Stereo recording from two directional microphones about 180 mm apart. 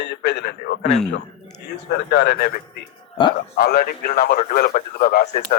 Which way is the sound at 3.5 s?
55° left (ahead or behind).